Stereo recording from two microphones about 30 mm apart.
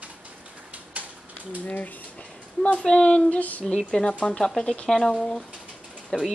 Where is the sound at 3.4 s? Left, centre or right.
Left.